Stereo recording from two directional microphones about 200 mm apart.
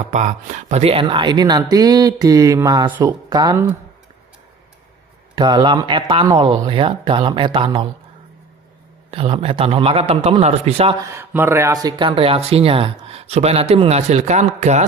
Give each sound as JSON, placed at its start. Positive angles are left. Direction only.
{"t": 0.1, "sound": "speech", "side_deg": -40}
{"t": 5.3, "sound": "speech", "side_deg": -20}
{"t": 9.0, "sound": "speech", "side_deg": -30}
{"t": 11.0, "sound": "speech", "side_deg": -15}